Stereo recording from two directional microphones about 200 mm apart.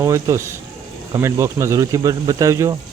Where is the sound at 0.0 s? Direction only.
15° right (ahead or behind).